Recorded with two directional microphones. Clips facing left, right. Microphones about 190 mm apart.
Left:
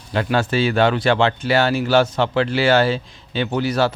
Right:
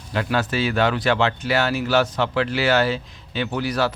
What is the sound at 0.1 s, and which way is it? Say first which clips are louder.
Speech: left 3 dB; 30° left (ahead or behind).